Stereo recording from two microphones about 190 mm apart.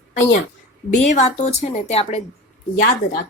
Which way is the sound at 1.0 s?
35° left (ahead or behind).